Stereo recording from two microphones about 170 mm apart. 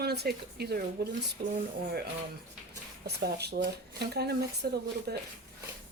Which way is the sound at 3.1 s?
70° right (ahead or behind).